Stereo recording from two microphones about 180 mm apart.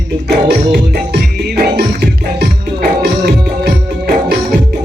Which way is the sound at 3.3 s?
60° right (ahead or behind).